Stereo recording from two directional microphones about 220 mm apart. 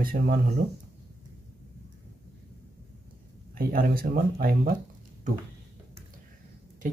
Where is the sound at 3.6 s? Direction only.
45° right (ahead or behind).